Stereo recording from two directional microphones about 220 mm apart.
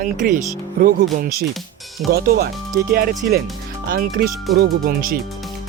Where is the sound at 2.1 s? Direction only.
45° right (ahead or behind).